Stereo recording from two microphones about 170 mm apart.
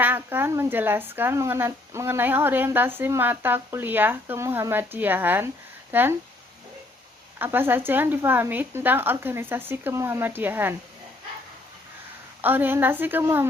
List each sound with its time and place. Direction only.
0.0 s speech: 10° right (ahead or behind)
7.3 s speech: 10° right (ahead or behind)
12.4 s speech: 10° right (ahead or behind)